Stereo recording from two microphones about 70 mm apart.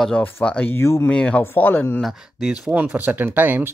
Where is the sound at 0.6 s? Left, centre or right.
Left.